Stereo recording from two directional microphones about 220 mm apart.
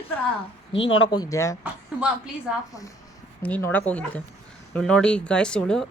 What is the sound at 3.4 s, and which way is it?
Speech, 5° left (ahead or behind).